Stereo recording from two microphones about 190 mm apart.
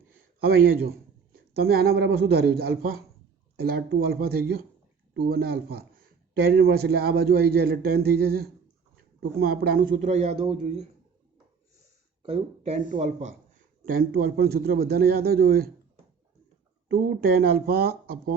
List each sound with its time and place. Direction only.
0.3 s a man's voice: 55° right (ahead or behind); by 10.8 s 30° right (ahead or behind)
12.2 s speech: 30° right (ahead or behind)
13.8 s a man's voice: 50° right (ahead or behind)
16.9 s a man's voice: 55° right (ahead or behind)